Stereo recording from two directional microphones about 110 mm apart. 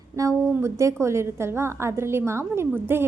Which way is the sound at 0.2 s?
30° right (ahead or behind).